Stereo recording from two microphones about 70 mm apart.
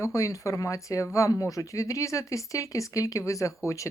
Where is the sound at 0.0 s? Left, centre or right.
Left.